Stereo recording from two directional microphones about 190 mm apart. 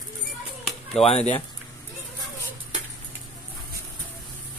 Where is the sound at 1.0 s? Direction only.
35° left (ahead or behind).